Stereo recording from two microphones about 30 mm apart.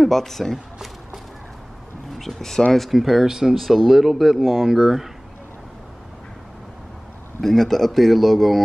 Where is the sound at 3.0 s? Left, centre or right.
Centre.